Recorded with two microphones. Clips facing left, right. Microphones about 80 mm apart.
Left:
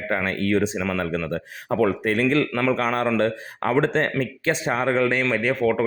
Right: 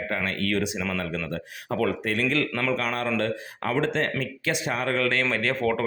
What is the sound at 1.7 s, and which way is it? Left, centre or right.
Speech, left.